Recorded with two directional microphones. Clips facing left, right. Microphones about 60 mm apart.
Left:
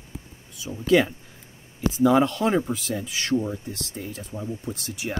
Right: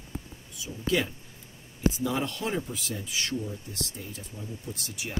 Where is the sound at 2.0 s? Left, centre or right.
Left.